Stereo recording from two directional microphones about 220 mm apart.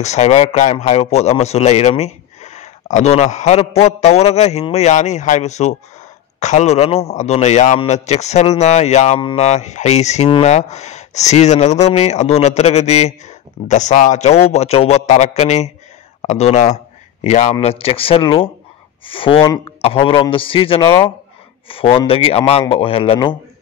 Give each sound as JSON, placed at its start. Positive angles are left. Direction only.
{"t": 0.0, "sound": "a man's voice", "side_deg": 30}